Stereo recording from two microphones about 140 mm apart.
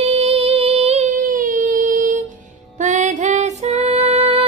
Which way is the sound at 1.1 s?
70° right (ahead or behind).